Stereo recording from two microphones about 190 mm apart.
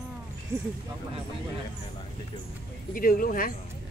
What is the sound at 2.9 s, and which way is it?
Speech, 50° left (ahead or behind).